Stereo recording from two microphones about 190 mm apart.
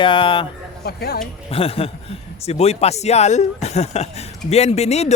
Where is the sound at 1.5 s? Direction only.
30° left (ahead or behind).